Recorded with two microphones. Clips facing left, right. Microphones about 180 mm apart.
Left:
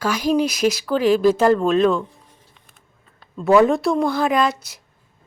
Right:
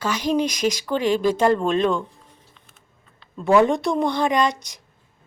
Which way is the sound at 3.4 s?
Centre (ahead or behind).